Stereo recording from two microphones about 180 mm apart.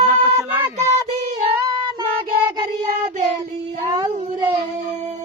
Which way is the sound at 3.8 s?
25° right (ahead or behind).